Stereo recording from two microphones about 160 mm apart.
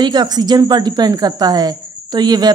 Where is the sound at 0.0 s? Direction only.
25° right (ahead or behind).